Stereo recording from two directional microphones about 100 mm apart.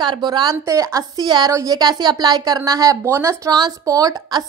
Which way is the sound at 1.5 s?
30° right (ahead or behind).